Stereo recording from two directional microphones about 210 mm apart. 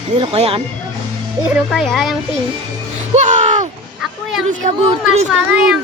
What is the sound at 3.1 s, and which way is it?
Music, 35° right (ahead or behind).